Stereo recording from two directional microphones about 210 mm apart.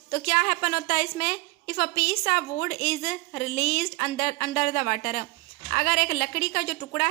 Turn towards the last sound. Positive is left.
turn(degrees=40)  # may be behind; listen again after turning